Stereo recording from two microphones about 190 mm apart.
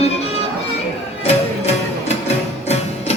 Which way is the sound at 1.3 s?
35° left (ahead or behind).